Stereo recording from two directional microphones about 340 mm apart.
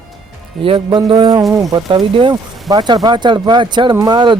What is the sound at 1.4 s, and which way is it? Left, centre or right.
Speech, centre.